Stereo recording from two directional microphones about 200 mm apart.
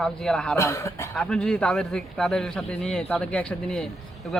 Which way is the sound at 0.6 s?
15° left (ahead or behind).